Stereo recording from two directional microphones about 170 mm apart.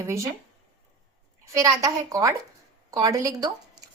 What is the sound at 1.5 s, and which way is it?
A woman's voice, 20° right (ahead or behind).